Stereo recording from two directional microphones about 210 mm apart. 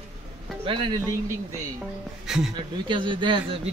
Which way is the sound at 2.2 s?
5° right (ahead or behind).